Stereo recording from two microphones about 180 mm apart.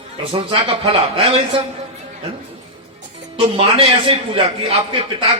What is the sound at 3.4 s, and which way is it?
A man's voice, 30° right (ahead or behind).